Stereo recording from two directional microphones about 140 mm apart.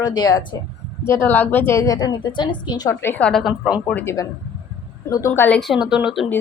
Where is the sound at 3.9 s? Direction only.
20° left (ahead or behind).